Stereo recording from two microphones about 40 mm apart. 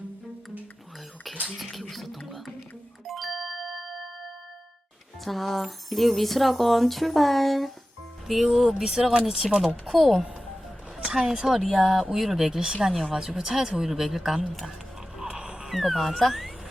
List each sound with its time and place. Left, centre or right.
1.5 s speech: centre
3.1 s music: centre
5.2 s speech: centre
11.1 s speech: centre
11.7 s speech: centre
12.5 s speech: centre
15.2 s music: right
15.7 s speech: centre